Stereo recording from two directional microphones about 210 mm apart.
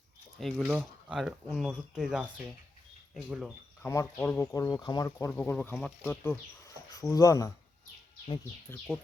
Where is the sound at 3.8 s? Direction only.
10° left (ahead or behind).